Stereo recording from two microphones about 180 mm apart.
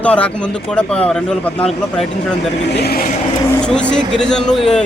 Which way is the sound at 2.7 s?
65° left (ahead or behind).